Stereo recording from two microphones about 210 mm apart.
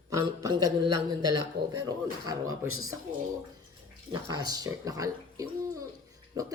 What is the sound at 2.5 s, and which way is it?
Speech, 80° right.